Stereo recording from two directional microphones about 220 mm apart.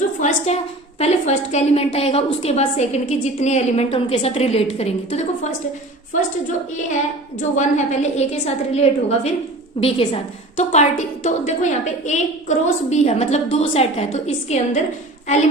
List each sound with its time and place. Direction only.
0.2 s a woman's voice: 30° left (ahead or behind)
7.3 s a woman's voice: 35° left (ahead or behind)